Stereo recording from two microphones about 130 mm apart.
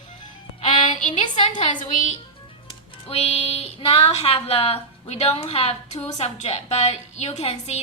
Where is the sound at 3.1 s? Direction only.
55° left (ahead or behind).